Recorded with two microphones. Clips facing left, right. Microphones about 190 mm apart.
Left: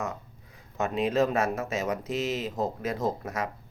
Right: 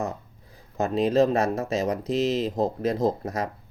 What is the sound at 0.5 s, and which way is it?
Speech, 35° right (ahead or behind).